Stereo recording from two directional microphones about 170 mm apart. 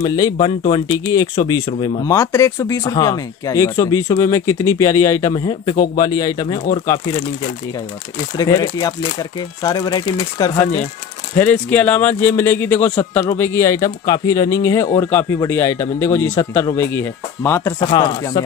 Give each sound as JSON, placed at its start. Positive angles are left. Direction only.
{"t": 0.0, "sound": "speech", "side_deg": 20}
{"t": 2.0, "sound": "speech", "side_deg": 15}
{"t": 8.4, "sound": "speech", "side_deg": 20}
{"t": 11.3, "sound": "speech", "side_deg": 10}
{"t": 16.3, "sound": "speech", "side_deg": 25}